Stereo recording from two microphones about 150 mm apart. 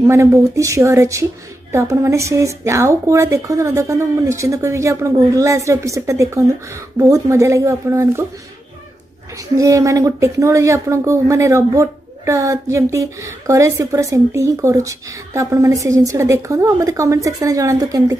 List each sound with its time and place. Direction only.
0.0 s a woman's voice: 20° right (ahead or behind)
9.6 s a woman's voice: 20° right (ahead or behind)